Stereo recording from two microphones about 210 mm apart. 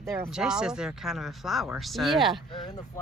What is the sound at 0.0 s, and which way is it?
Speech, 10° right (ahead or behind).